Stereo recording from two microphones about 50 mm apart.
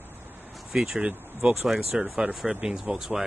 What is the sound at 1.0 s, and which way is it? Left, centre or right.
Speech, right.